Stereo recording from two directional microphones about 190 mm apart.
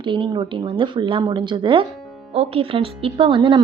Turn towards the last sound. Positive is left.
turn(degrees=-25)  # may be behind; listen again after turning